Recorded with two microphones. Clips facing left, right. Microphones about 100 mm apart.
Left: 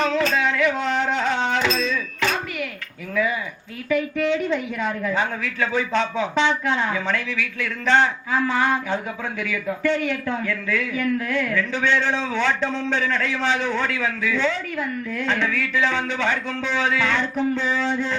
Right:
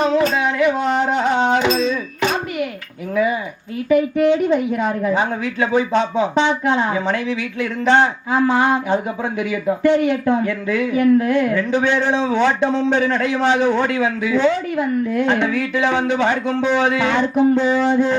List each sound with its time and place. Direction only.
0.0 s music: 15° right (ahead or behind)
3.8 s speech: 20° right (ahead or behind)